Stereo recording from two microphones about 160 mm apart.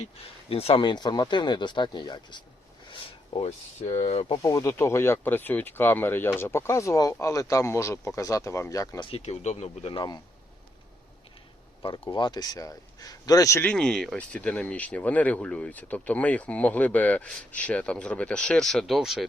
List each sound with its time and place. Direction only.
0.5 s speech: 35° left (ahead or behind)
4.4 s speech: 20° left (ahead or behind)
9.0 s speech: 40° left (ahead or behind)
11.8 s speech: 35° left (ahead or behind); by 19.2 s centre (ahead or behind)